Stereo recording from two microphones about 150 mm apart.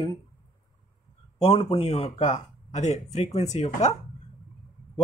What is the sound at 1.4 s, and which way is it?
Speech, 40° left (ahead or behind).